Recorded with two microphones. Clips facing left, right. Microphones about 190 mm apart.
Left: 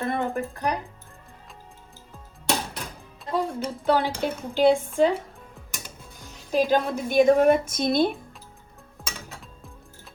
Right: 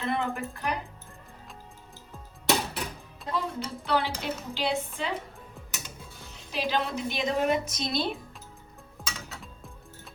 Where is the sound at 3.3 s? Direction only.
50° left (ahead or behind).